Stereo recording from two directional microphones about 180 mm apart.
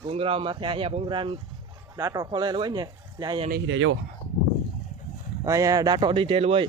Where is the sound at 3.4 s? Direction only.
75° right (ahead or behind); by 4.0 s 90° right.